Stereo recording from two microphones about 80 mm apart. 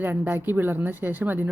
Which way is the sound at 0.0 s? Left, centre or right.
Right.